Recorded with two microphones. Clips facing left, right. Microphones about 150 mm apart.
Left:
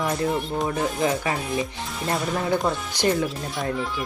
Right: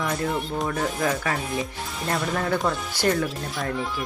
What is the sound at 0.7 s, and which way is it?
Speech, 20° left (ahead or behind).